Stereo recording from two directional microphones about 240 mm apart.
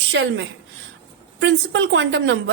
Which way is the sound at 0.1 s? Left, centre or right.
Right.